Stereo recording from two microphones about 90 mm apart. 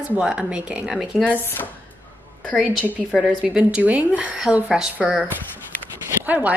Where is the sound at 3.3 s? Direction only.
5° right (ahead or behind).